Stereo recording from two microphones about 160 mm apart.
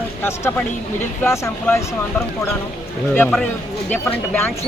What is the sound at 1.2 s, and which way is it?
Speech, 15° left (ahead or behind).